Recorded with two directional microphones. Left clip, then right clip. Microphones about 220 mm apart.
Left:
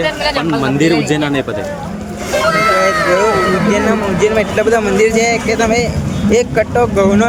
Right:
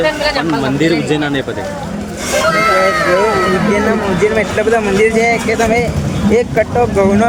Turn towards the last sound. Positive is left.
turn(degrees=5)  # may be behind; listen again after turning